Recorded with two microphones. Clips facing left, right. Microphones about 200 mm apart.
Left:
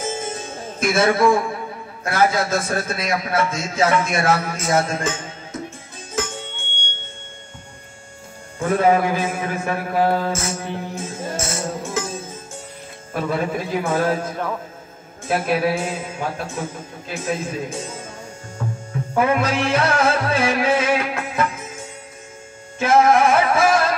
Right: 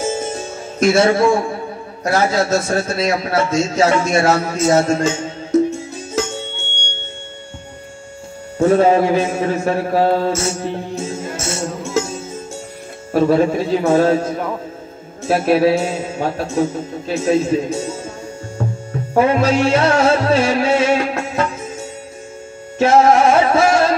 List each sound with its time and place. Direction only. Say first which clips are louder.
0.0 s music: right 5 dB; 25° right (ahead or behind)
0.8 s a man's voice: right 4 dB; 30° right (ahead or behind)
6.2 s music: right 6 dB; 25° right (ahead or behind)
8.6 s a man's voice: right 5 dB; 25° right (ahead or behind)
11.4 s music: right 3 dB; 25° right (ahead or behind)
13.1 s a man's voice: right 9 dB; 25° right (ahead or behind)
19.2 s music: right 5 dB; 25° right (ahead or behind)
22.8 s music: right 3 dB; 30° right (ahead or behind)